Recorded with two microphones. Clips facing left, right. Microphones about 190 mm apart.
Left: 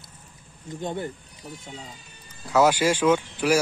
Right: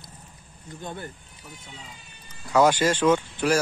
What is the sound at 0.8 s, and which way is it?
Speech, 25° left (ahead or behind).